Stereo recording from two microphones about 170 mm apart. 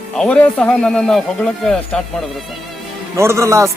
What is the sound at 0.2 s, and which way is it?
Speech, 5° left (ahead or behind).